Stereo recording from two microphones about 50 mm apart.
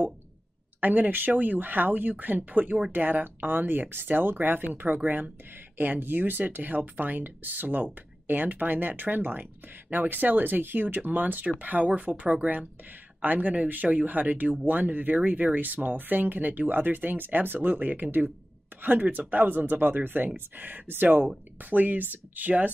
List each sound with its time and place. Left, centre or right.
0.7 s speech: right